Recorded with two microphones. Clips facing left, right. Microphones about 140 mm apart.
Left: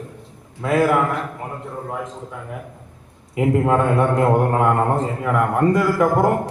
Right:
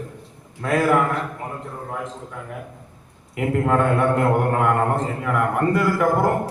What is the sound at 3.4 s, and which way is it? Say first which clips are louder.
A man's voice: left 2 dB; 20° left (ahead or behind).